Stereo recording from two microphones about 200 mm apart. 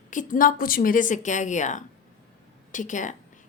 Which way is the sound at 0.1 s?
40° left (ahead or behind).